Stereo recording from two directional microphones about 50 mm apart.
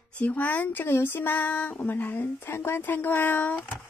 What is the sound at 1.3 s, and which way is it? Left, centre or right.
A woman's voice, left.